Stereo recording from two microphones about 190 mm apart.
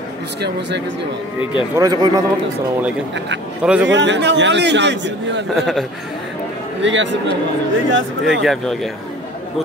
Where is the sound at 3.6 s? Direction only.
5° right (ahead or behind).